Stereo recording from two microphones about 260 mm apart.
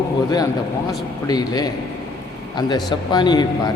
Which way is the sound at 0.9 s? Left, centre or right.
Centre.